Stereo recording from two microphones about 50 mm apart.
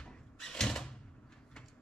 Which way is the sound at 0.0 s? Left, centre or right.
Centre.